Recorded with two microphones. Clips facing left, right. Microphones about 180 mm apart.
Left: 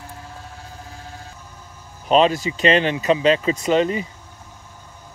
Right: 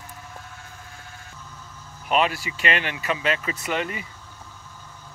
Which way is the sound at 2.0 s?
25° left (ahead or behind).